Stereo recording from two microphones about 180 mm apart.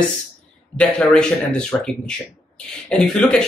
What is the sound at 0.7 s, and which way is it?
Speech, 5° left (ahead or behind).